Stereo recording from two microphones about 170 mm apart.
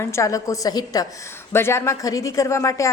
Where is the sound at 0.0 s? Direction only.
15° left (ahead or behind).